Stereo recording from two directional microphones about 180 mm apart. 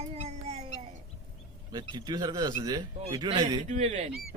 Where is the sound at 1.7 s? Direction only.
20° right (ahead or behind).